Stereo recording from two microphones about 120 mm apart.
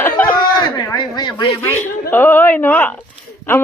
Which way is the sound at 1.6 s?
15° left (ahead or behind).